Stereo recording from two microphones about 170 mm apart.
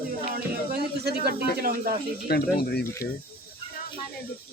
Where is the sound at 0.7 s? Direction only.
70° right (ahead or behind).